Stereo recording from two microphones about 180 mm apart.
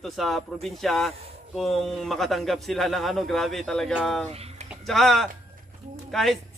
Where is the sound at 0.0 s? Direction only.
Centre (ahead or behind).